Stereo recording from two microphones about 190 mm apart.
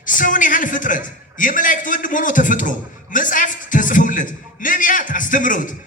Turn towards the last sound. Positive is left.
turn(degrees=45)  # may be behind; listen again after turning